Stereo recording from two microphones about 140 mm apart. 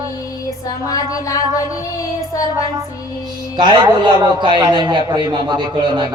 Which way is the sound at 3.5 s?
35° right (ahead or behind).